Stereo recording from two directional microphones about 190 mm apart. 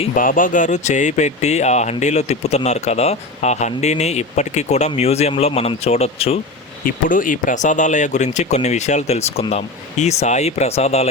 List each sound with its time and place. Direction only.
0.2 s speech: 45° left (ahead or behind)
6.8 s speech: 45° left (ahead or behind)